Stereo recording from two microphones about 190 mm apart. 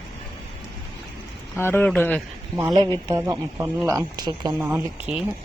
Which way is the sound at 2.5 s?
20° right (ahead or behind).